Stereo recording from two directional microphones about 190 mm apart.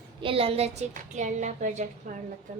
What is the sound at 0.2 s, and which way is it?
A woman's voice, 30° right (ahead or behind).